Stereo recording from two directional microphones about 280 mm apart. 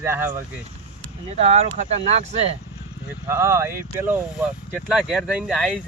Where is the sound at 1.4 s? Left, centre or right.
Right.